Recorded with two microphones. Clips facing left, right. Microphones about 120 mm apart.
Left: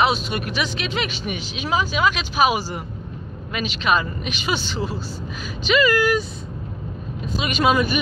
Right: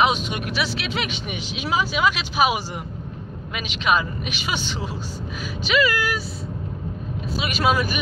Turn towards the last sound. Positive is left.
turn(degrees=0)  # may be behind; listen again after turning